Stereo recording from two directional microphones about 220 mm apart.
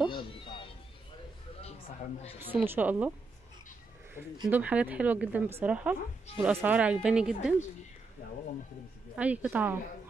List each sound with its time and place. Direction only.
0.1 s music: 20° left (ahead or behind)
2.3 s speech: 10° right (ahead or behind)
4.5 s a woman's voice: 5° right (ahead or behind)
9.1 s speech: 5° right (ahead or behind)